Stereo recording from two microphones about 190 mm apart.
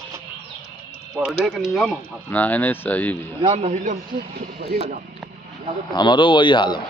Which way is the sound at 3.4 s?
35° right (ahead or behind).